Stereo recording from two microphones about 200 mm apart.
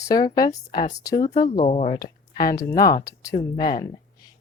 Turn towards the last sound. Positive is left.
turn(degrees=20)  # may be behind; listen again after turning